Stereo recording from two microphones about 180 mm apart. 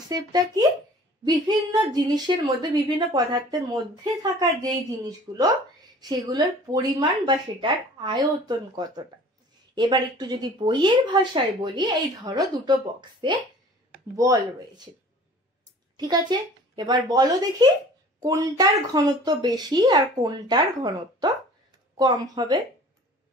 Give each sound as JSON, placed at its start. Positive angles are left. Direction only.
{"t": 0.1, "sound": "speech", "side_deg": -25}